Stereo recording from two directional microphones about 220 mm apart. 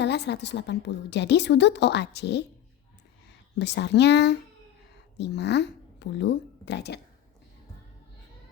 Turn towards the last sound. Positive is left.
turn(degrees=50)  # may be behind; listen again after turning